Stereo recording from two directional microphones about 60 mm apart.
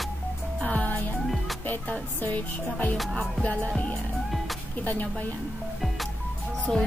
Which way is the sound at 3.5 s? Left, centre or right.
Left.